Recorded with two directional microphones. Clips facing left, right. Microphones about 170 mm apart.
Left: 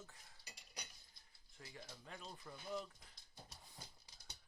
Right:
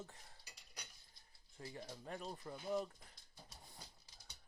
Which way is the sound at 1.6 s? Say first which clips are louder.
Right 6 dB; 35° right (ahead or behind).